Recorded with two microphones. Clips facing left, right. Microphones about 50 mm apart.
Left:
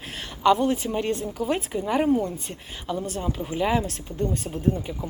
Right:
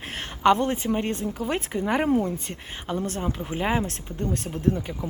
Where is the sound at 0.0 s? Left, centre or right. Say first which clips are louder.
Right 1 dB; right.